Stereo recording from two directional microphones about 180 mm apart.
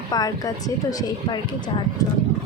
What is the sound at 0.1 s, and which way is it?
A woman's voice, 20° left (ahead or behind).